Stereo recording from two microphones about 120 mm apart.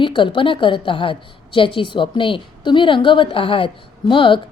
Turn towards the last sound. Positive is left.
turn(degrees=45)  # may be behind; listen again after turning